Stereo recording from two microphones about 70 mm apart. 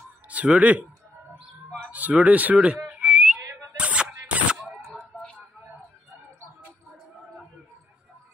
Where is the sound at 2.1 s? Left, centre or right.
Centre.